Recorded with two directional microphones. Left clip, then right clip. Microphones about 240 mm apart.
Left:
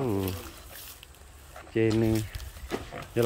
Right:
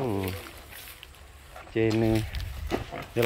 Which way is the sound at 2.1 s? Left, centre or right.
Left.